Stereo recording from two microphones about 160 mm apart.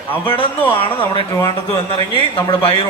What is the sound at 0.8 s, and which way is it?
Speech, 35° left (ahead or behind).